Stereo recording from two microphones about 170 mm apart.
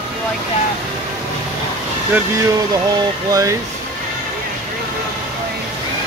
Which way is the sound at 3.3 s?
20° right (ahead or behind).